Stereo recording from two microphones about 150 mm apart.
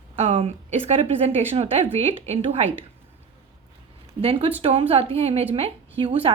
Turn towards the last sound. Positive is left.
turn(degrees=-40)  # may be behind; listen again after turning